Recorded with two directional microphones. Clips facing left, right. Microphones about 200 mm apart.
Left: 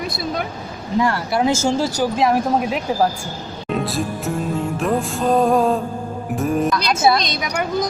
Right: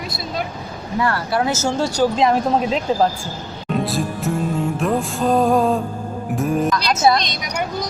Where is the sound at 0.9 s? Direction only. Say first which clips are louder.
Left 1 dB; 15° left (ahead or behind).